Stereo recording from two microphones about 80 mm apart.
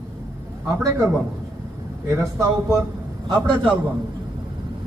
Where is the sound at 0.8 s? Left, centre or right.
Right.